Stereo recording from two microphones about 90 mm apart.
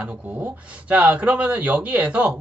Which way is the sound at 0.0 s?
15° right (ahead or behind).